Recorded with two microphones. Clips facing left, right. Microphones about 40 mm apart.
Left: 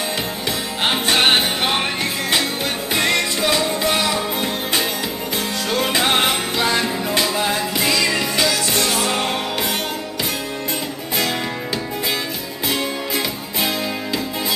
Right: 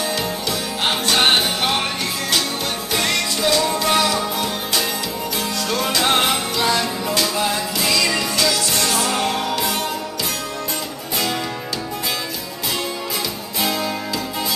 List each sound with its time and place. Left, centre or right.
0.5 s music: centre
2.9 s music: left
5.7 s music: left